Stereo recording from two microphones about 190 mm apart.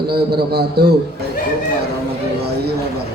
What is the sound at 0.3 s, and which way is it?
Speech, 55° right (ahead or behind).